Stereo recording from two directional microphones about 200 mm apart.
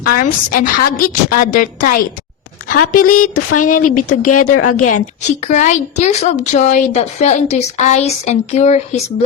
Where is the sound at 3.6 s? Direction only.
40° left (ahead or behind).